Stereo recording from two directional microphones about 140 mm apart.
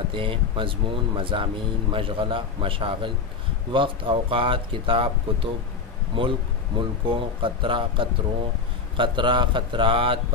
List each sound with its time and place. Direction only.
0.1 s speech: 40° right (ahead or behind)